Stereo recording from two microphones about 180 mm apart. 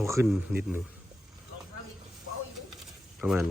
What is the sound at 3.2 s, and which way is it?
Speech, 10° right (ahead or behind).